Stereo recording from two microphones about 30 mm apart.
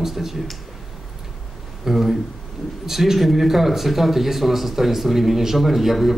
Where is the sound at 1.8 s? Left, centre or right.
Centre.